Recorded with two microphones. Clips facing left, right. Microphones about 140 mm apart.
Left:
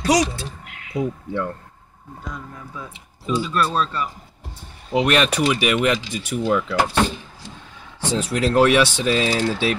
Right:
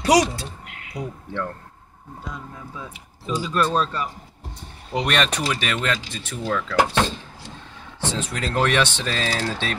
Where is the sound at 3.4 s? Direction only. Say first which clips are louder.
Even; 40° right (ahead or behind).